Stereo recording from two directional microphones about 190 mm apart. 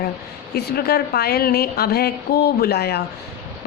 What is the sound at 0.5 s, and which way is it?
A woman's voice, 55° left (ahead or behind).